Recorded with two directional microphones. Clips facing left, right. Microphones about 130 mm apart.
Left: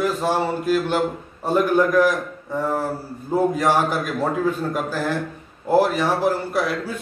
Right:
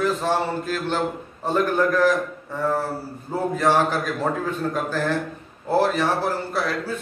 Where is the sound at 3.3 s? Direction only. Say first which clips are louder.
Left 2 dB; 15° left (ahead or behind).